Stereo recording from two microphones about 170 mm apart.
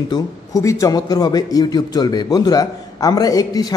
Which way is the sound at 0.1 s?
20° left (ahead or behind).